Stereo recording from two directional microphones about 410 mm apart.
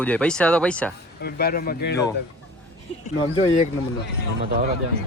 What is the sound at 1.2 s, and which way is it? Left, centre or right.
Speech, left.